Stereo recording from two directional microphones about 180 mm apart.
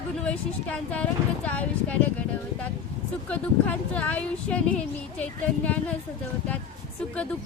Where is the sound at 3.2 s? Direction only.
5° left (ahead or behind).